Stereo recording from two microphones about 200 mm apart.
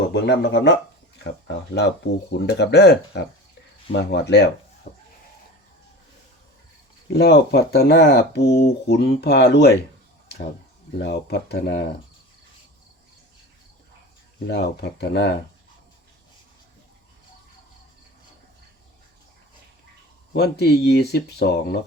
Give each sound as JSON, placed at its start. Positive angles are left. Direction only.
{"t": 0.0, "sound": "speech", "side_deg": 55}
{"t": 4.9, "sound": "a sound", "side_deg": 45}
{"t": 7.1, "sound": "speech", "side_deg": 55}
{"t": 10.9, "sound": "speech", "side_deg": 55}
{"t": 14.4, "sound": "speech", "side_deg": 60}
{"t": 20.3, "sound": "speech", "side_deg": 55}